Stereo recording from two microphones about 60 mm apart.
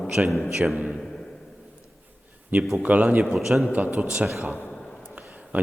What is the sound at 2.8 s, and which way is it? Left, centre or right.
Speech, right.